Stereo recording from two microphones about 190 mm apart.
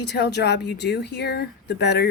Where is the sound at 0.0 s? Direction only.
60° left (ahead or behind).